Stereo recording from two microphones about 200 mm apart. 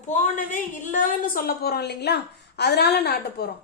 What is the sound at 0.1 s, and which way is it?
A woman's voice, 40° left (ahead or behind).